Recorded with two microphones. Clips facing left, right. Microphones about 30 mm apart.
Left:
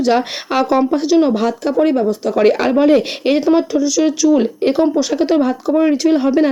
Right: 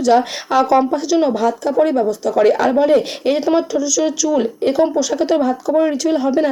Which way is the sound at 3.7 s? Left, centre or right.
Left.